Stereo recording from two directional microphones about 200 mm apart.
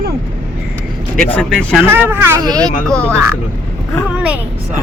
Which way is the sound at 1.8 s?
10° right (ahead or behind).